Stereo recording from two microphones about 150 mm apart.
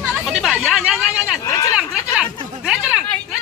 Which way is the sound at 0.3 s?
Centre (ahead or behind).